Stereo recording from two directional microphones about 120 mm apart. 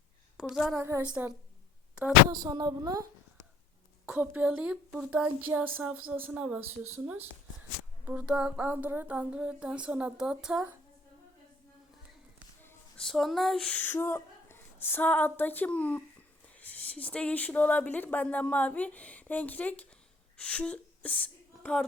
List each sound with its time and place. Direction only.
0.3 s a woman's voice: centre (ahead or behind)
0.8 s a woman's voice: 20° right (ahead or behind)
2.3 s speech: 35° right (ahead or behind)
4.0 s speech: 10° right (ahead or behind)
13.0 s speech: centre (ahead or behind)
13.7 s speech: 15° left (ahead or behind)